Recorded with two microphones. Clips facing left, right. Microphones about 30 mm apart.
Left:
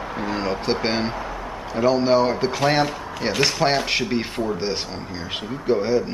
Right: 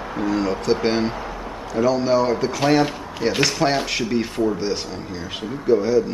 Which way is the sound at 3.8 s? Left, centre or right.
Left.